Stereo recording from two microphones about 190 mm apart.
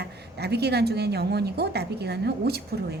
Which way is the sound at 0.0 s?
60° right (ahead or behind).